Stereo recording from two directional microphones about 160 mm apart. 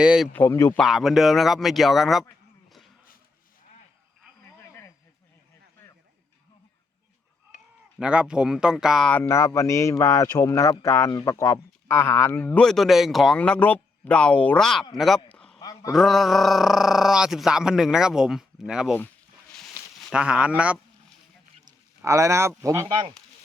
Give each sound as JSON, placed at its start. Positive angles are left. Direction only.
{"t": 0.0, "sound": "speech", "side_deg": -5}
{"t": 0.3, "sound": "speech", "side_deg": 15}
{"t": 0.8, "sound": "speech", "side_deg": 0}
{"t": 2.6, "sound": "a sound", "side_deg": 0}
{"t": 4.4, "sound": "a sound", "side_deg": 15}
{"t": 7.9, "sound": "speech", "side_deg": -5}
{"t": 9.2, "sound": "speech", "side_deg": 15}
{"t": 15.3, "sound": "a sound", "side_deg": 5}
{"t": 15.6, "sound": "a sound", "side_deg": 20}
{"t": 15.9, "sound": "speech", "side_deg": 0}
{"t": 20.1, "sound": "speech", "side_deg": -5}
{"t": 21.6, "sound": "speech", "side_deg": -20}